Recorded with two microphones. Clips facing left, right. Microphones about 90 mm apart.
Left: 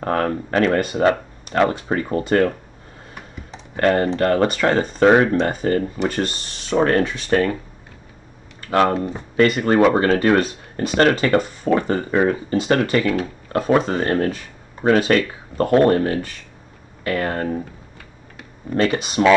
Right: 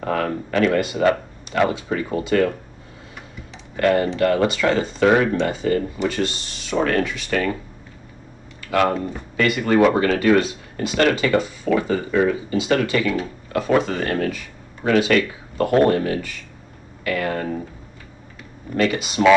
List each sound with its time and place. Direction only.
0.0 s speech: 40° left (ahead or behind)
3.5 s speech: 40° left (ahead or behind)
8.5 s a sound: 35° left (ahead or behind)
9.4 s speech: 35° left (ahead or behind)
18.8 s speech: 40° left (ahead or behind)